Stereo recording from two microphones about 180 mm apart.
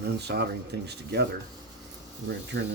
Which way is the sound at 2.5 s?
75° right (ahead or behind).